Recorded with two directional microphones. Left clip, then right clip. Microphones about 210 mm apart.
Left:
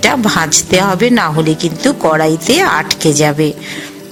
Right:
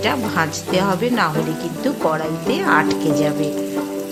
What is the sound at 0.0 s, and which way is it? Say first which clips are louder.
Speech: left 7 dB; 35° left (ahead or behind).